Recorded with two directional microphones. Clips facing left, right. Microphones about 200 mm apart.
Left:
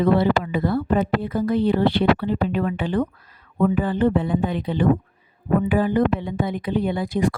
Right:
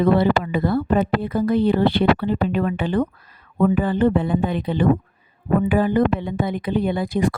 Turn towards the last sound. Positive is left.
turn(degrees=-60)  # may be behind; listen again after turning